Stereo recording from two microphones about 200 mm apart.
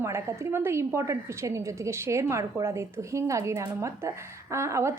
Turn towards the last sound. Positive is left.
turn(degrees=-15)  # may be behind; listen again after turning